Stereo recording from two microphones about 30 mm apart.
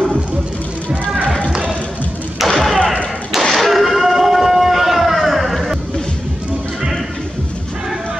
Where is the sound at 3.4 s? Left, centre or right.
Centre.